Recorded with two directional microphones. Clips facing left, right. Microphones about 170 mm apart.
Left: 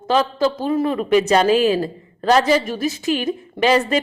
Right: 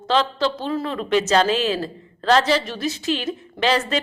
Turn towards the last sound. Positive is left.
turn(degrees=10)  # may be behind; listen again after turning